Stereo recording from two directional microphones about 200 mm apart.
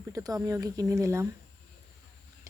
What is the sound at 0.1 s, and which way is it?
Speech, 15° right (ahead or behind).